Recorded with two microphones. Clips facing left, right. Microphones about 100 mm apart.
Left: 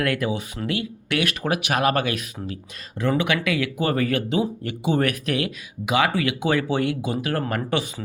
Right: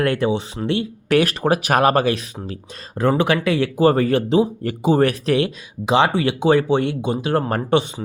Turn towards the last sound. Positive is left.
turn(degrees=-25)  # may be behind; listen again after turning